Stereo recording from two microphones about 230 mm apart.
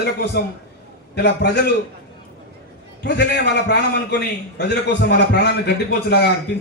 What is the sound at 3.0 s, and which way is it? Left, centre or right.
A man's voice, left.